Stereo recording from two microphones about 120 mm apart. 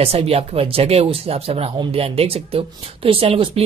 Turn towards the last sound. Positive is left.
turn(degrees=-50)  # may be behind; listen again after turning